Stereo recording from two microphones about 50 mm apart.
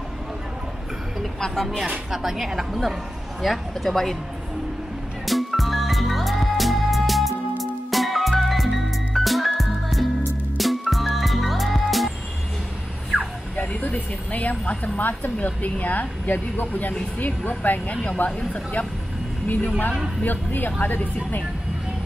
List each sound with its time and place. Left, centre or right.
1.4 s speech: centre
2.0 s a woman's voice: centre
5.2 s music: centre
13.6 s speech: left